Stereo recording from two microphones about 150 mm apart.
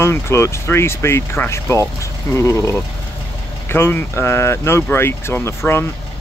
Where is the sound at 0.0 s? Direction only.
20° left (ahead or behind).